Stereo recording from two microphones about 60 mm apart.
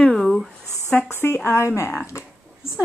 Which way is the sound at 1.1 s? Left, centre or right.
Left.